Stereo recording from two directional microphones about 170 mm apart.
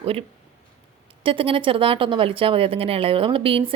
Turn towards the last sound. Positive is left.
turn(degrees=-30)  # may be behind; listen again after turning